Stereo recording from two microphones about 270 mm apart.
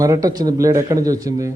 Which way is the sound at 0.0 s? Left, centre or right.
Centre.